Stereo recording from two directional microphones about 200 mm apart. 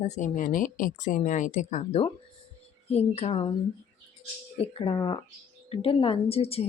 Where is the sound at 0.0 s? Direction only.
35° left (ahead or behind).